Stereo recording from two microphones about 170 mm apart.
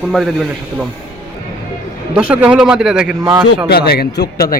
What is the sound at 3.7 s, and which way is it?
Speech, 65° left (ahead or behind).